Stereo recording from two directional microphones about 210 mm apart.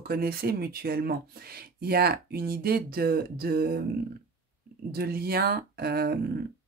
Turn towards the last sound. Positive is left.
turn(degrees=-50)  # may be behind; listen again after turning